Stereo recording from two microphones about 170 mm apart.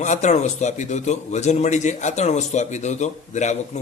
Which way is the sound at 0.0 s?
45° left (ahead or behind).